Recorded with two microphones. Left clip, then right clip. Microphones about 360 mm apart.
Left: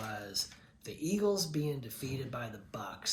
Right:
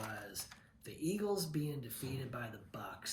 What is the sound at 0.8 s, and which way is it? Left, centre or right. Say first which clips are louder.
Speech: left 6 dB; centre.